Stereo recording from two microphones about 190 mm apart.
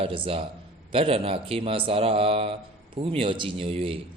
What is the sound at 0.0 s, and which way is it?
A man's voice, 30° right (ahead or behind).